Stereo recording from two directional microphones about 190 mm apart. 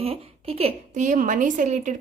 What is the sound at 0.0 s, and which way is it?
A woman's voice, 30° right (ahead or behind).